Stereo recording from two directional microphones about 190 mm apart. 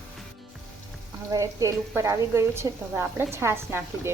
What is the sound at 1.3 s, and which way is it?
A woman's voice, 20° right (ahead or behind).